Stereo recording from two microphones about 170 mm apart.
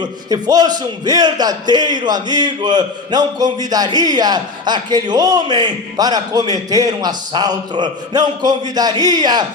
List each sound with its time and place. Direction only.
0.0 s a man's voice: 20° right (ahead or behind)